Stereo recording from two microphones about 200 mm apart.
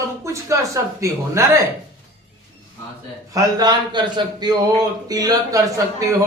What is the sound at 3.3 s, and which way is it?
A man's voice, 20° right (ahead or behind).